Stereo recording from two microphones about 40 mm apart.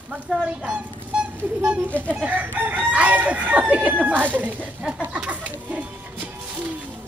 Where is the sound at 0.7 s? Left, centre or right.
Right.